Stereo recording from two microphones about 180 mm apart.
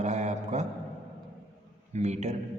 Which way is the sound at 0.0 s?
40° right (ahead or behind).